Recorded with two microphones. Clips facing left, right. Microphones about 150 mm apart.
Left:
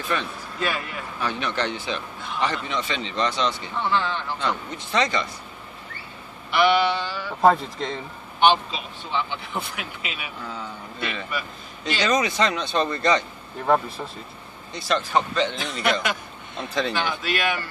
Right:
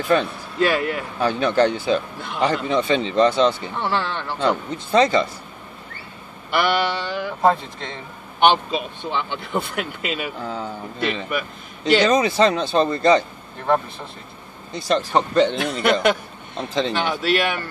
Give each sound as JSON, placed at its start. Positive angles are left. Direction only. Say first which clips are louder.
{"t": 0.6, "sound": "speech", "louder": "right 9 dB", "side_deg": -65}
{"t": 1.2, "sound": "speech", "louder": "right 9 dB", "side_deg": -40}
{"t": 4.9, "sound": "speech", "louder": "right 7 dB", "side_deg": -30}
{"t": 6.5, "sound": "speech", "louder": "left 1 dB", "side_deg": -55}
{"t": 8.4, "sound": "speech", "louder": "right 2 dB", "side_deg": -55}
{"t": 10.4, "sound": "speech", "louder": "right 6 dB", "side_deg": -30}
{"t": 11.2, "sound": "a man's voice", "louder": "right 5 dB", "side_deg": -55}
{"t": 12.1, "sound": "speech", "louder": "right 5 dB", "side_deg": -30}
{"t": 14.9, "sound": "speech", "louder": "right 3 dB", "side_deg": -40}
{"t": 15.4, "sound": "speech", "louder": "right 5 dB", "side_deg": -60}
{"t": 16.5, "sound": "speech", "louder": "right 3 dB", "side_deg": -25}
{"t": 16.9, "sound": "speech", "louder": "right 5 dB", "side_deg": -55}